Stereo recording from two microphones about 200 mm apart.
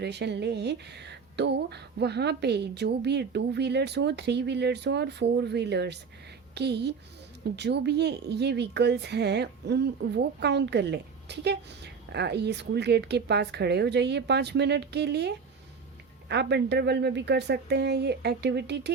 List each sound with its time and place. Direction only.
0.0 s a woman's voice: 60° right (ahead or behind)
16.3 s a woman's voice: 55° right (ahead or behind)